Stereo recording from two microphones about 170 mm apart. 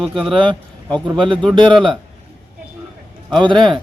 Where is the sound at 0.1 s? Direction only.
Centre (ahead or behind).